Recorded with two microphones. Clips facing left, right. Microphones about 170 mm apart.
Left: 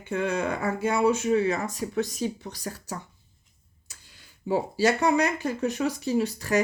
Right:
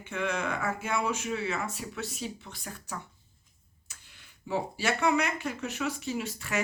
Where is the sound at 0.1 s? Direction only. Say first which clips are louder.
Left 5 dB; 35° left (ahead or behind).